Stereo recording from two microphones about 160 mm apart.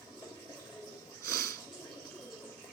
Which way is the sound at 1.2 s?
20° left (ahead or behind).